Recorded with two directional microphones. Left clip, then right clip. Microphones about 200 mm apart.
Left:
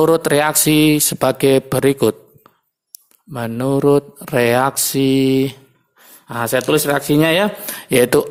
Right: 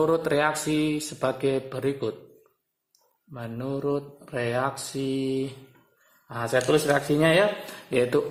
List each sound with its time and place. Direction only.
0.0 s speech: 45° left (ahead or behind)
3.3 s speech: 50° left (ahead or behind)